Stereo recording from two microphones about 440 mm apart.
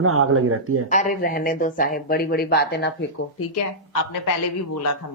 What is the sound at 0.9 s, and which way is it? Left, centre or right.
A woman's voice, centre.